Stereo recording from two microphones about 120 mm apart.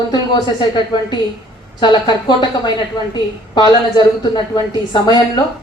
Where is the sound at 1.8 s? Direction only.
40° left (ahead or behind).